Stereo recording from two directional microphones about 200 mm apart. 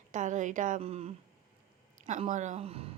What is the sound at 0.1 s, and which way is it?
Speech, 40° right (ahead or behind).